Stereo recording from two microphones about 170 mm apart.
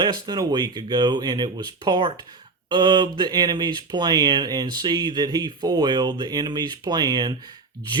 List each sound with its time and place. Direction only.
0.0 s speech: 25° right (ahead or behind)